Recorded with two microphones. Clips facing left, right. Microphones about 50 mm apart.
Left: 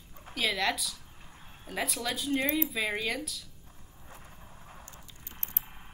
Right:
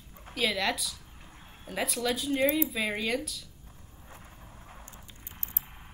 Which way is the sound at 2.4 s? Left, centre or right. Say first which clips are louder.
Right 6 dB; centre.